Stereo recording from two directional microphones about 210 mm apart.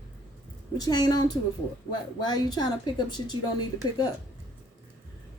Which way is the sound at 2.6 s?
20° left (ahead or behind).